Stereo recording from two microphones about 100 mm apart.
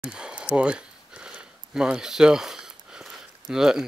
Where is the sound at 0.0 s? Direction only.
10° right (ahead or behind).